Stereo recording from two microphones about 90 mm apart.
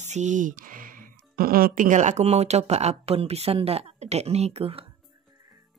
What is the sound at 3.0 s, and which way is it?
A woman's voice, 90° right.